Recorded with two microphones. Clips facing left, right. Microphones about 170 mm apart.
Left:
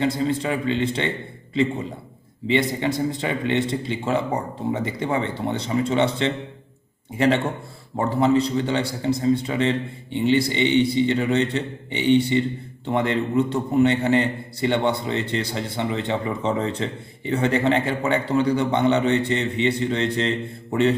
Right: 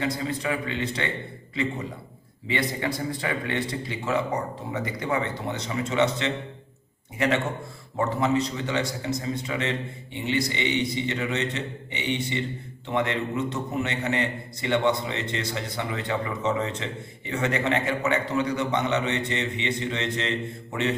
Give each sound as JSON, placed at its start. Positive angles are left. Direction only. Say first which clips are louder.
{"t": 0.0, "sound": "a man's voice", "louder": "left 6 dB", "side_deg": 25}
{"t": 2.5, "sound": "a man's voice", "louder": "left 6 dB", "side_deg": 25}